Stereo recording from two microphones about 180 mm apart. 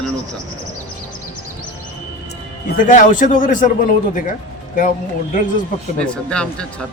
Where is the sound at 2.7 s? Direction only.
45° left (ahead or behind).